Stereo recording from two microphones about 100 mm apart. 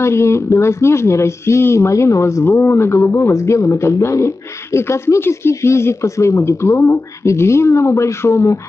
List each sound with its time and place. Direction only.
0.0 s speech: 25° left (ahead or behind)